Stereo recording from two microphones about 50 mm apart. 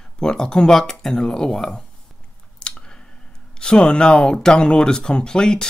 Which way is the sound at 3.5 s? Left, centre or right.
Centre.